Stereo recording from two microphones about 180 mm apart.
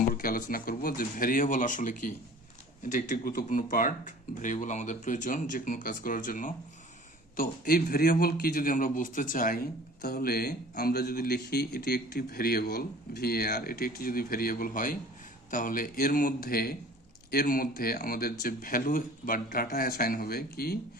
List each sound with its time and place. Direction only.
0.1 s speech: 55° left (ahead or behind)
10.0 s speech: 60° left (ahead or behind)